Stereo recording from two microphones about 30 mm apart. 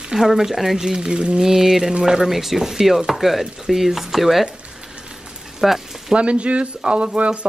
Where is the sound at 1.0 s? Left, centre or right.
Right.